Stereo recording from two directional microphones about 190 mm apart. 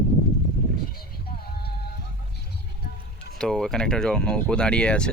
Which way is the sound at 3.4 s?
5° left (ahead or behind).